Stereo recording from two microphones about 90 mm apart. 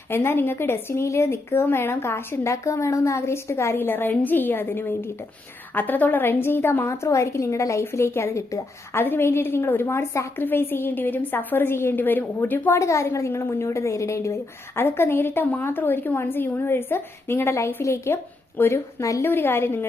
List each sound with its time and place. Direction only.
0.1 s a woman's voice: 25° left (ahead or behind)
12.7 s a woman's voice: 35° left (ahead or behind)
19.2 s a woman's voice: 25° left (ahead or behind)